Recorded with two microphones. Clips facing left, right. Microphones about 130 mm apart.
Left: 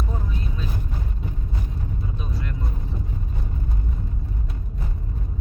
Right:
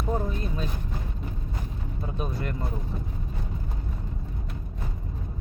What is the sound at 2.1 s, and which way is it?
Vehicle, 55° right (ahead or behind).